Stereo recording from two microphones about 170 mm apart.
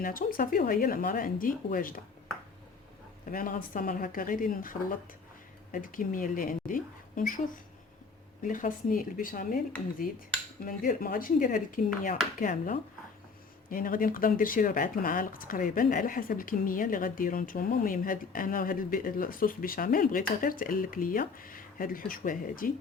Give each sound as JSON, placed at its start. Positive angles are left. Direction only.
{"t": 0.0, "sound": "speech", "side_deg": 55}
{"t": 3.2, "sound": "a woman's voice", "side_deg": 55}
{"t": 10.7, "sound": "speech", "side_deg": 55}